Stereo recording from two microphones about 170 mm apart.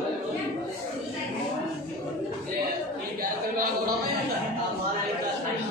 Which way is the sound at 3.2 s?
60° right (ahead or behind).